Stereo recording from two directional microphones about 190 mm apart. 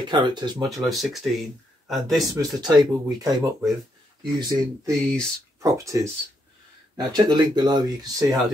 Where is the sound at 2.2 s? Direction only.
20° right (ahead or behind).